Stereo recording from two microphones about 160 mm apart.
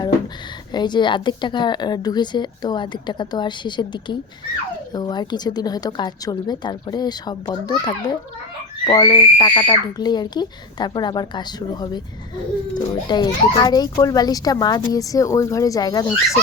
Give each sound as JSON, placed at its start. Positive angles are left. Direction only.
{"t": 0.7, "sound": "speech", "side_deg": 25}